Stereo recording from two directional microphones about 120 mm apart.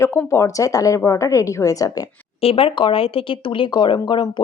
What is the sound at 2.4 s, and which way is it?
Speech, 55° left (ahead or behind).